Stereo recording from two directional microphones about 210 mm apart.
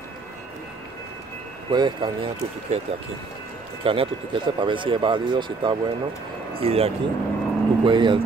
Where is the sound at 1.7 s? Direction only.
20° right (ahead or behind).